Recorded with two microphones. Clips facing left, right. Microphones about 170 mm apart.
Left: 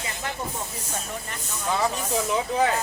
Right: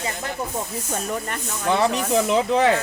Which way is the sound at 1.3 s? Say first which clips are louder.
Right 4 dB; 70° right (ahead or behind).